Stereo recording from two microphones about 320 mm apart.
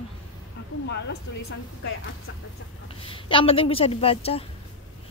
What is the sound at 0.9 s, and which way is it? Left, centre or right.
Speech, left.